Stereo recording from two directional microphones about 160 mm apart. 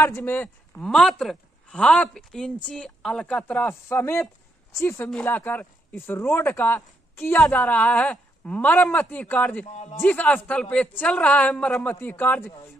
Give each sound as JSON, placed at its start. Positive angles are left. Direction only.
{"t": 0.0, "sound": "speech", "side_deg": 15}
{"t": 9.7, "sound": "speech", "side_deg": 45}
{"t": 9.9, "sound": "speech", "side_deg": 10}